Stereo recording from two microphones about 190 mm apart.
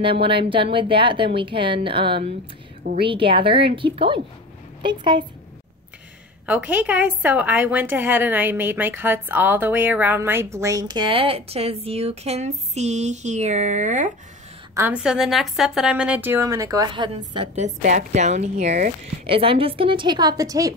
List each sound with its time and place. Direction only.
0.0 s a woman's voice: 25° right (ahead or behind)
6.4 s a woman's voice: 10° right (ahead or behind); by 14.1 s 40° right (ahead or behind)
14.7 s a woman's voice: 10° right (ahead or behind)
17.6 s a woman's voice: 40° right (ahead or behind); by 20.7 s 20° right (ahead or behind)